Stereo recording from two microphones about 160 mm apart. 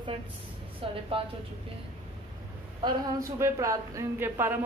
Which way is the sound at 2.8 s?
25° right (ahead or behind).